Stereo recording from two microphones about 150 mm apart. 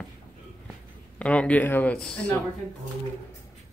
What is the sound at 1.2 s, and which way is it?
Speech, 10° left (ahead or behind).